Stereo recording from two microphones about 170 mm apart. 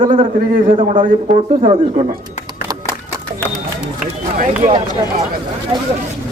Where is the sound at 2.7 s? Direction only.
20° right (ahead or behind).